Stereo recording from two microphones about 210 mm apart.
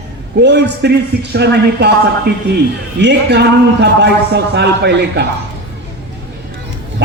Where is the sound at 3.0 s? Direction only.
55° right (ahead or behind).